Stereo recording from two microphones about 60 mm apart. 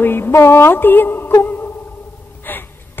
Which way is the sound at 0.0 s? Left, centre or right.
Left.